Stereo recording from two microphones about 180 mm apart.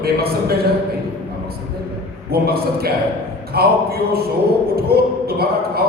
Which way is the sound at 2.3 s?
60° right (ahead or behind).